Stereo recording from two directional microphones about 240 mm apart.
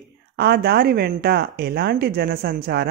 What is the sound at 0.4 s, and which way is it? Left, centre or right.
Speech, right.